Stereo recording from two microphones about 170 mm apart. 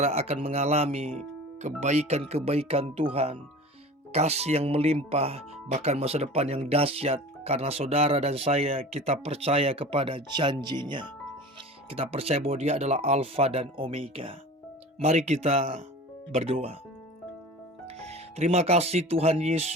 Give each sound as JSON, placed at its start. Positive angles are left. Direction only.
{"t": 0.0, "sound": "speech", "side_deg": -40}
{"t": 17.8, "sound": "speech", "side_deg": -40}